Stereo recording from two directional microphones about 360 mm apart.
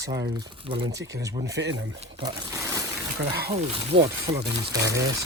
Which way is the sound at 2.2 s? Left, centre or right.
Centre.